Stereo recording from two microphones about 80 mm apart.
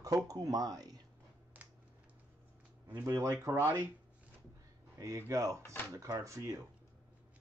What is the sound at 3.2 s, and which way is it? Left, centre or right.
Speech, right.